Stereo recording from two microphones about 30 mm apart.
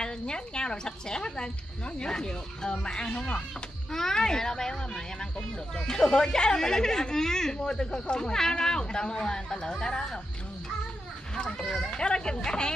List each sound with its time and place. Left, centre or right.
0.0 s speech: left
3.9 s speech: centre
11.3 s speech: left